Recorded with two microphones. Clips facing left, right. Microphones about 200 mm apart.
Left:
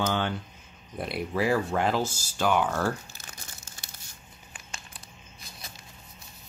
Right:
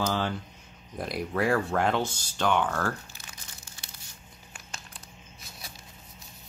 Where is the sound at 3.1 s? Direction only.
45° left (ahead or behind).